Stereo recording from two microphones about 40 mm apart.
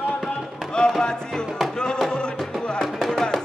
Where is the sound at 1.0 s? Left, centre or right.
Centre.